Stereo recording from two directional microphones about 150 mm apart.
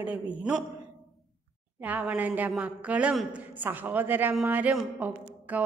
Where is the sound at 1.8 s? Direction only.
10° right (ahead or behind).